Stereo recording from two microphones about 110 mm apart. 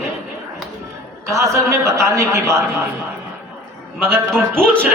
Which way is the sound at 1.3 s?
30° right (ahead or behind).